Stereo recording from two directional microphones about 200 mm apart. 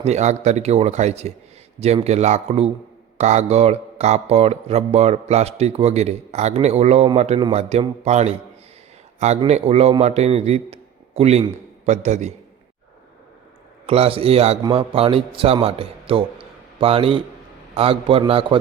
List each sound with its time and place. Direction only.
0.0 s speech: 35° right (ahead or behind)
13.8 s a man's voice: 30° right (ahead or behind)